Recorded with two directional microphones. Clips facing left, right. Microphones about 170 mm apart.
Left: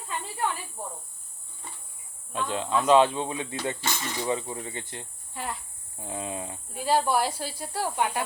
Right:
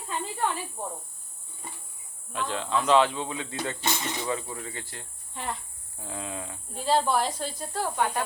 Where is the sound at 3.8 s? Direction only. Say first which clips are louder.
Right 2 dB; 20° right (ahead or behind).